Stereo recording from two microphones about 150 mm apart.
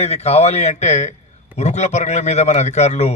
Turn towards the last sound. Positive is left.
turn(degrees=45)  # may be behind; listen again after turning